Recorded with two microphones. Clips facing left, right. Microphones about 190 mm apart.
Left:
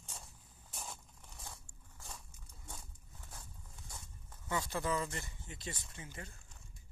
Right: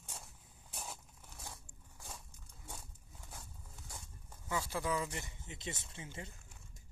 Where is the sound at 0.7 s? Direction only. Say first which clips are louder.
Right 1 dB; 10° right (ahead or behind).